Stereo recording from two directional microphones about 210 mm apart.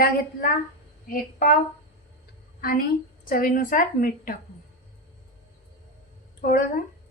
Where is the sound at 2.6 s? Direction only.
45° left (ahead or behind).